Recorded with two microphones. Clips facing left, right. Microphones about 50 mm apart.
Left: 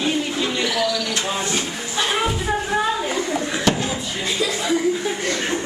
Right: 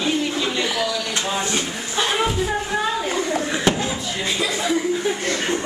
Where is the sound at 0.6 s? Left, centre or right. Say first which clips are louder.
Left 1 dB; right.